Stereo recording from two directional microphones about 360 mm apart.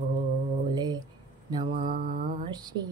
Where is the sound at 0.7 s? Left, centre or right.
Centre.